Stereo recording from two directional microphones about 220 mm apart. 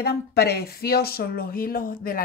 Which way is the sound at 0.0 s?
45° left (ahead or behind).